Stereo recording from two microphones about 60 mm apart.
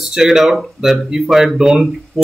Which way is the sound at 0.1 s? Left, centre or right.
Centre.